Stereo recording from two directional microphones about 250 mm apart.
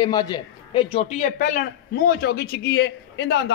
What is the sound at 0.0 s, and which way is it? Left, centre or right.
A man's voice, centre.